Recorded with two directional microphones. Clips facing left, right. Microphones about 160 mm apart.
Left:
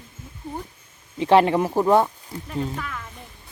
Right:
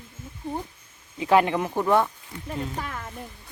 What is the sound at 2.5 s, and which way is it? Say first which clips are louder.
Speech: left 2 dB; 35° right (ahead or behind).